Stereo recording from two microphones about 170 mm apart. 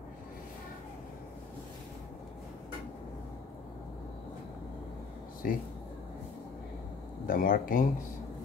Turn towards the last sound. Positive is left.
turn(degrees=55)  # may be behind; listen again after turning